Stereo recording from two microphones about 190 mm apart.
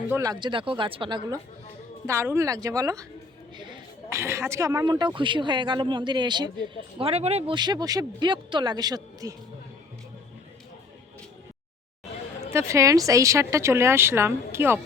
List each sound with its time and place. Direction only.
0.1 s speech: 20° right (ahead or behind)
2.0 s speech: 15° right (ahead or behind)
3.6 s a sound: 25° right (ahead or behind)
4.2 s speech: 15° right (ahead or behind)
12.5 s speech: 15° right (ahead or behind)